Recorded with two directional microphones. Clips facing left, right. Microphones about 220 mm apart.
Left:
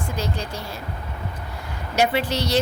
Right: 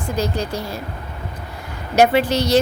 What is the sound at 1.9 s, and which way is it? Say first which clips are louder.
Speech: right 6 dB; 45° right (ahead or behind).